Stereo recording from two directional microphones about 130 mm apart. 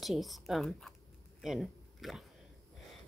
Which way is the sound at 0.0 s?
Centre (ahead or behind).